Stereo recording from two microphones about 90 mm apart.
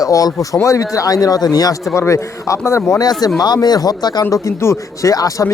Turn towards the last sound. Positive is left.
turn(degrees=40)  # may be behind; listen again after turning